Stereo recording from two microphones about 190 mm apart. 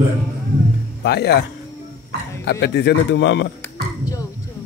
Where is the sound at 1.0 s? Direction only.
60° left (ahead or behind).